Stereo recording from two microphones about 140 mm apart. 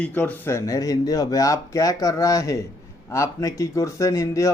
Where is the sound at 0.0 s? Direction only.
10° left (ahead or behind).